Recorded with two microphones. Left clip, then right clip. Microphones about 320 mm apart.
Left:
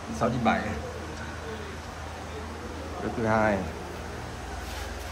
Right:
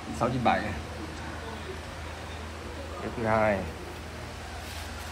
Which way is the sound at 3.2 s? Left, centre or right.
Centre.